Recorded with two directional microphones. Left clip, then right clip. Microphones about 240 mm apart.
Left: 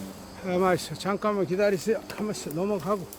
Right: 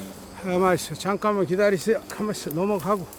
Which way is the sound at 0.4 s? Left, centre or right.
Centre.